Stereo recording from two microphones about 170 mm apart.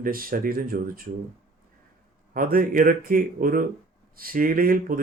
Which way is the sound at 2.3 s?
55° right (ahead or behind).